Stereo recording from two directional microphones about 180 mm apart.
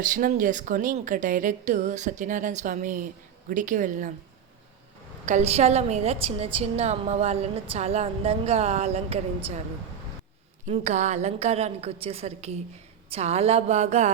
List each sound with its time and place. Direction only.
0.0 s a woman's voice: 50° right (ahead or behind)
5.2 s a woman's voice: 40° right (ahead or behind)
10.7 s a woman's voice: 40° right (ahead or behind)